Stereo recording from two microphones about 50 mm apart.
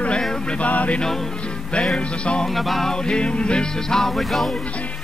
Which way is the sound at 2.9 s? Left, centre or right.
Centre.